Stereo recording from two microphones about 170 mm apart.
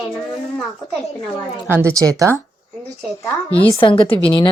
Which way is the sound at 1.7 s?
15° right (ahead or behind).